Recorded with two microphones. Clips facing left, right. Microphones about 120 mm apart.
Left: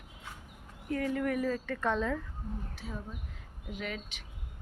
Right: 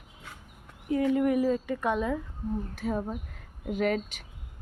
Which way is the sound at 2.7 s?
55° right (ahead or behind).